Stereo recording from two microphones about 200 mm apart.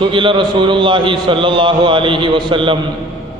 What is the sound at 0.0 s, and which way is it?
A man's voice, 25° right (ahead or behind).